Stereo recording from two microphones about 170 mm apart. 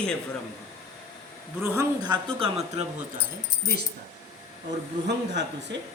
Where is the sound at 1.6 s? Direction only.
20° right (ahead or behind).